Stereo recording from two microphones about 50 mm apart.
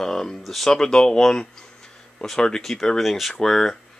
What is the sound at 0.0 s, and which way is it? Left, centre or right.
Speech, centre.